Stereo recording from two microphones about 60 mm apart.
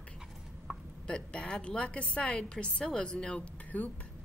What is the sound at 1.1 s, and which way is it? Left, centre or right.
A woman's voice, centre.